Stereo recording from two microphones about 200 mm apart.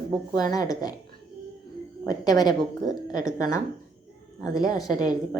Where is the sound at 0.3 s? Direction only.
20° left (ahead or behind).